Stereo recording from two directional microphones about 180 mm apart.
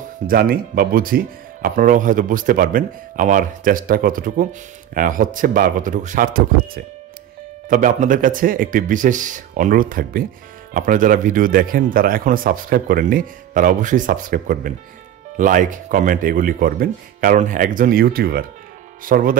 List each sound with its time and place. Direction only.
0.3 s speech: 55° right (ahead or behind)